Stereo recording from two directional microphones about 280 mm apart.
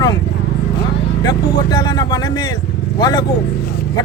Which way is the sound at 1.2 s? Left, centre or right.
Centre.